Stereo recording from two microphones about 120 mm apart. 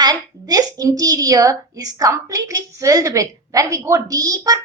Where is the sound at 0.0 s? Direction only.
35° right (ahead or behind).